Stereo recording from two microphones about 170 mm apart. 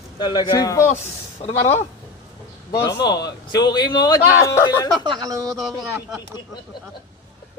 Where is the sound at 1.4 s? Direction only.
40° left (ahead or behind).